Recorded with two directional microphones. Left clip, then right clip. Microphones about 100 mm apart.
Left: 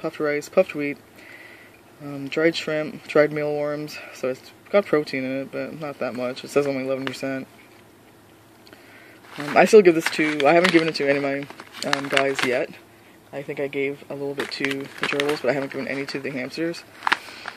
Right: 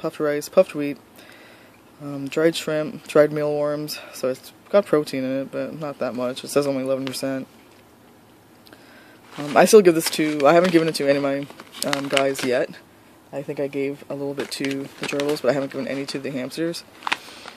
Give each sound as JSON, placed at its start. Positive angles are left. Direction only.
{"t": 0.0, "sound": "speech", "side_deg": -25}
{"t": 2.0, "sound": "speech", "side_deg": -25}
{"t": 9.4, "sound": "speech", "side_deg": -25}
{"t": 14.8, "sound": "speech", "side_deg": -20}
{"t": 15.3, "sound": "speech", "side_deg": -30}